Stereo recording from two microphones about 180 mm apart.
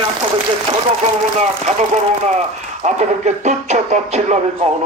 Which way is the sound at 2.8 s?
40° right (ahead or behind).